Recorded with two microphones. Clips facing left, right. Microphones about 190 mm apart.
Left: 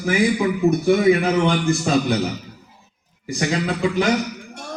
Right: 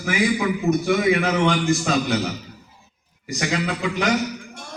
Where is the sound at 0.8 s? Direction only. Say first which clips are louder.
Left 5 dB; 35° left (ahead or behind).